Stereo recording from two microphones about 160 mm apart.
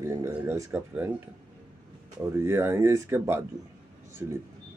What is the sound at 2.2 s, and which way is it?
Speech, 15° right (ahead or behind).